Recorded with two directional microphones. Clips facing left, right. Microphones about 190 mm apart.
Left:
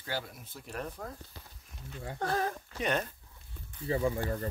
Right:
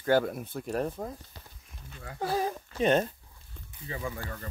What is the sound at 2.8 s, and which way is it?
Speech, 30° right (ahead or behind).